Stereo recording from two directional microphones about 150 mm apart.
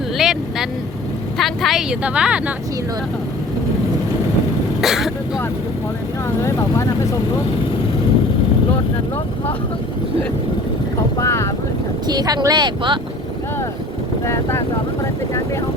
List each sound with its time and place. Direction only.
0.2 s vehicle: 5° right (ahead or behind)
1.4 s speech: centre (ahead or behind)
4.8 s speech: centre (ahead or behind)
6.4 s speech: 20° left (ahead or behind)
11.2 s vehicle: 20° left (ahead or behind)
12.0 s speech: 25° right (ahead or behind)